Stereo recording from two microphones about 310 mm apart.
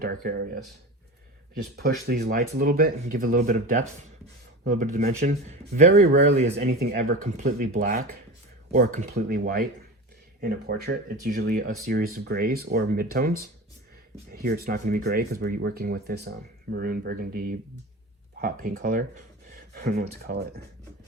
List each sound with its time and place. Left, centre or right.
0.0 s speech: right
1.7 s speech: right